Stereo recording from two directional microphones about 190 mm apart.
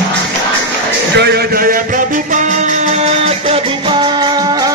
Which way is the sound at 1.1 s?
60° right (ahead or behind).